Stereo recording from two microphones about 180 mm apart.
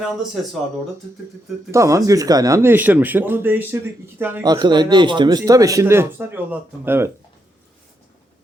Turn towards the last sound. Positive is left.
turn(degrees=-10)  # may be behind; listen again after turning